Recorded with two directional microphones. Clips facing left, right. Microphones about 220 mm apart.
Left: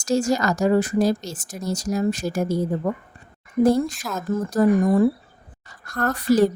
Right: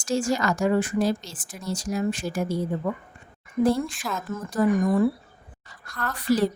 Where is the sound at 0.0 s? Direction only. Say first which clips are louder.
Left 4 dB; 40° left (ahead or behind).